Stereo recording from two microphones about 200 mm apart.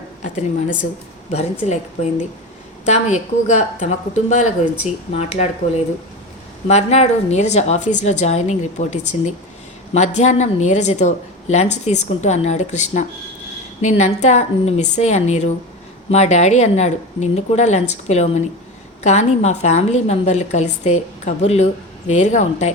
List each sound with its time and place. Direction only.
1.3 s a woman's voice: 35° left (ahead or behind)
2.8 s a woman's voice: 35° left (ahead or behind)